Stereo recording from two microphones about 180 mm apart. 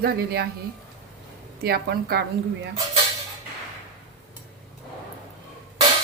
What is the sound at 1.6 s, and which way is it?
Speech, 60° right (ahead or behind).